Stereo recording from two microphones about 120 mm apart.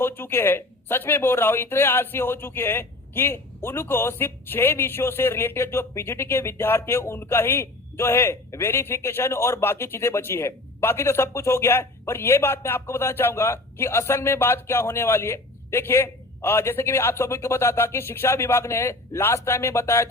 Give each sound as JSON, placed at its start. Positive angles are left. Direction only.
{"t": 0.0, "sound": "speech", "side_deg": 20}